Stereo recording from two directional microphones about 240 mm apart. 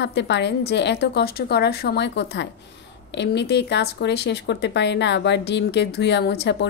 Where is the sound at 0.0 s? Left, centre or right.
Left.